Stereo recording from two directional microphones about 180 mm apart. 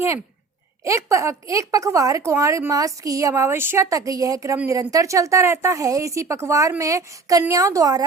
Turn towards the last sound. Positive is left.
turn(degrees=-20)  # may be behind; listen again after turning